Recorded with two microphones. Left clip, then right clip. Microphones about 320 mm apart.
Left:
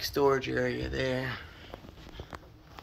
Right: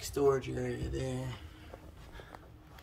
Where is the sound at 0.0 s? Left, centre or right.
Centre.